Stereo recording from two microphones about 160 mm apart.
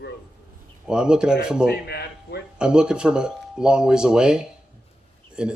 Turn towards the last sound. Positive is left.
turn(degrees=-5)  # may be behind; listen again after turning